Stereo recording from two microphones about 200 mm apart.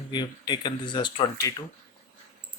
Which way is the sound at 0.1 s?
20° left (ahead or behind).